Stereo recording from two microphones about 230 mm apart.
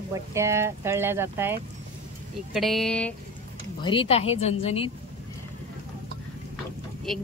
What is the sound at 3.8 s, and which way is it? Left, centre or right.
A woman's voice, left.